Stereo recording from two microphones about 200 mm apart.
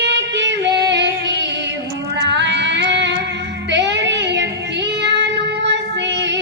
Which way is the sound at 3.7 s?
60° right (ahead or behind).